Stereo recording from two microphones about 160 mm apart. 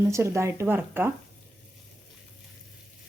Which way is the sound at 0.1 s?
15° right (ahead or behind).